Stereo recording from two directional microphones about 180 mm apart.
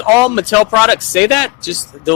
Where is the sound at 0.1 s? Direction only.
10° right (ahead or behind).